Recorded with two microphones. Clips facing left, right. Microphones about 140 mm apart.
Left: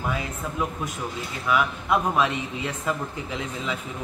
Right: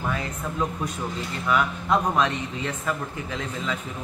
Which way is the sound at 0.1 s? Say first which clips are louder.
Even; 10° left (ahead or behind).